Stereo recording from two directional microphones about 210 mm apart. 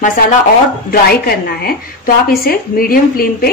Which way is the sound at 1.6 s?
45° left (ahead or behind).